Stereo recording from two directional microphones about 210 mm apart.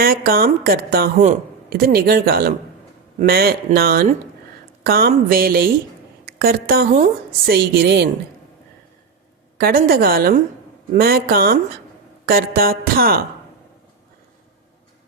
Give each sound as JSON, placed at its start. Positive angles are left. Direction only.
{"t": 0.3, "sound": "a woman's voice", "side_deg": -45}
{"t": 9.6, "sound": "a woman's voice", "side_deg": -45}